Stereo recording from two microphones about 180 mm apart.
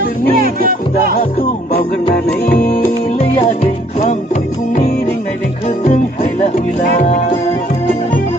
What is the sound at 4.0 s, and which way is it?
Music, 45° left (ahead or behind).